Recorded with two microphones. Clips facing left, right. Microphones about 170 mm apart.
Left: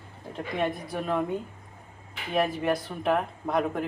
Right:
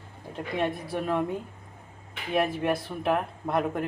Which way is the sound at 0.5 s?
Centre (ahead or behind).